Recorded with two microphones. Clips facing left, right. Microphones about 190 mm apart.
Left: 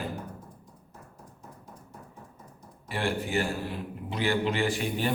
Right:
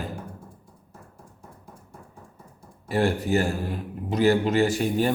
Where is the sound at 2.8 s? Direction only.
40° right (ahead or behind).